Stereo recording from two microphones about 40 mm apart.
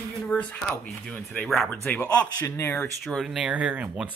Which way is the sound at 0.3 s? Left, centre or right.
Left.